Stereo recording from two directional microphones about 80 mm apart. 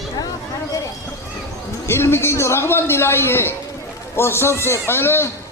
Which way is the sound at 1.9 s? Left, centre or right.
Left.